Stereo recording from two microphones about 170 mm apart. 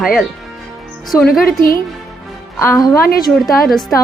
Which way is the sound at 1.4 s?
60° left (ahead or behind).